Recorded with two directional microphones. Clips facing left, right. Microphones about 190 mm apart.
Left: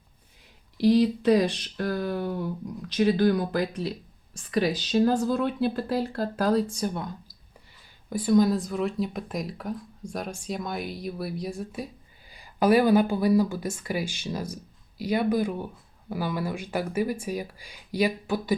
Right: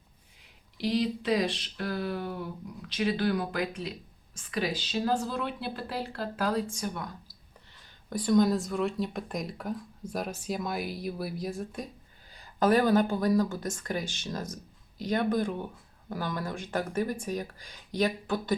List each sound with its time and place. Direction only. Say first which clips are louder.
0.8 s speech: left 8 dB; 45° left (ahead or behind)
8.1 s speech: left 3 dB; 5° left (ahead or behind)